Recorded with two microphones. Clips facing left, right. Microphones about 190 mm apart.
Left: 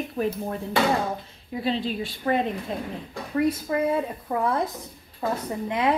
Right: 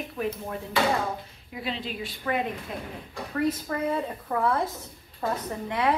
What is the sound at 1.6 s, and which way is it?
A woman's voice, 30° left (ahead or behind).